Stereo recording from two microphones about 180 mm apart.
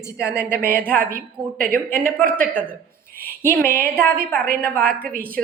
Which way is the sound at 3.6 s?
50° right (ahead or behind).